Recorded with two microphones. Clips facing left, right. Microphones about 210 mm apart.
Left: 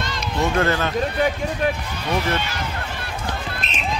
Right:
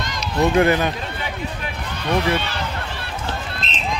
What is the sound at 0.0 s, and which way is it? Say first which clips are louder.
Speech: right 3 dB; 15° right (ahead or behind).